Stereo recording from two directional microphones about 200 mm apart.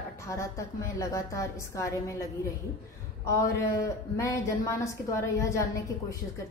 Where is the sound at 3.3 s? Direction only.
15° left (ahead or behind).